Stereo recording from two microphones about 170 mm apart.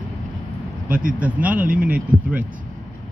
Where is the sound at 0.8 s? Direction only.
55° right (ahead or behind).